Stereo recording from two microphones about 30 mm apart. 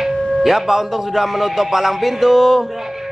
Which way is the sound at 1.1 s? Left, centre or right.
Centre.